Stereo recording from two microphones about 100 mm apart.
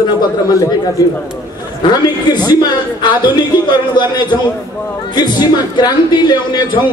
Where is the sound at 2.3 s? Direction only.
45° left (ahead or behind).